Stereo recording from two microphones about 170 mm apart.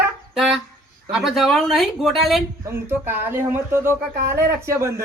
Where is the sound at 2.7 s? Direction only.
15° right (ahead or behind).